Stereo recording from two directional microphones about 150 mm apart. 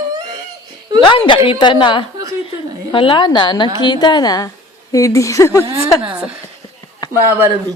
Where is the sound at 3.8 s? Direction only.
30° left (ahead or behind).